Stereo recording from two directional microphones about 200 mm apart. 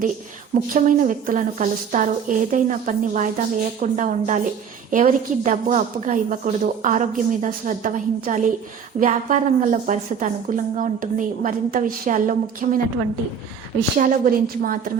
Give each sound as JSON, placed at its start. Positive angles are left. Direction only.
{"t": 0.7, "sound": "a woman's voice", "side_deg": -40}
{"t": 14.0, "sound": "a woman's voice", "side_deg": -45}